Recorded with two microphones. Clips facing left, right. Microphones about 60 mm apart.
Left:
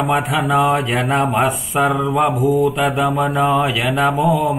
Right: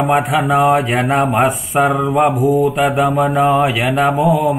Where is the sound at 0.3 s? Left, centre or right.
Centre.